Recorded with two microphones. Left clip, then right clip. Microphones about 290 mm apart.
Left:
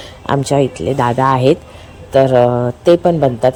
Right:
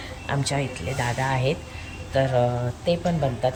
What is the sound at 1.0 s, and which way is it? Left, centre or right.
Speech, left.